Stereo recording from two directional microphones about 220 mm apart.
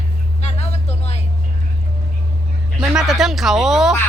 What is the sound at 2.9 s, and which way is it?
Speech, centre (ahead or behind).